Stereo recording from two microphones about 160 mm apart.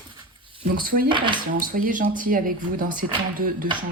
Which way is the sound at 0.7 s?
65° right (ahead or behind).